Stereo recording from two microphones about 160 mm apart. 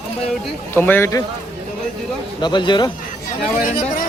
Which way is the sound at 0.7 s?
15° left (ahead or behind).